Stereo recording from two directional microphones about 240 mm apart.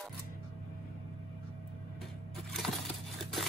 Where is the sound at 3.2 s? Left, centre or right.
Centre.